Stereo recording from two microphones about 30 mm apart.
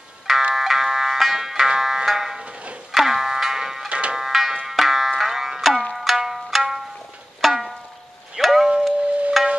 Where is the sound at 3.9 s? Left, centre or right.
Right.